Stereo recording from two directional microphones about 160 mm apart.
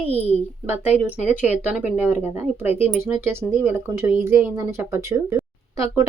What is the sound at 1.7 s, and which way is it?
Speech, 10° right (ahead or behind).